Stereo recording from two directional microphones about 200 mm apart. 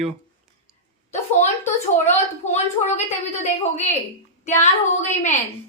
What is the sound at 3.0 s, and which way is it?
Speech, 35° left (ahead or behind).